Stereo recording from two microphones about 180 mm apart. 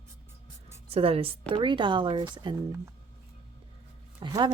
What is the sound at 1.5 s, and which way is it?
Speech, 25° right (ahead or behind).